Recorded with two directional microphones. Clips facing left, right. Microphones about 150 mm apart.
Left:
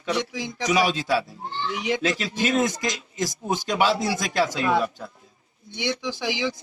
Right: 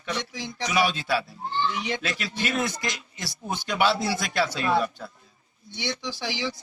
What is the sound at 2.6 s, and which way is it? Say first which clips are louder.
Speech: left 4 dB; 40° left (ahead or behind).